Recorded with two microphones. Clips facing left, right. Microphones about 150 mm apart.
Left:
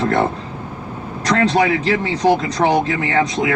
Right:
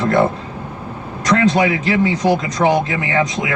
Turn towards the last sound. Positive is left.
turn(degrees=35)  # may be behind; listen again after turning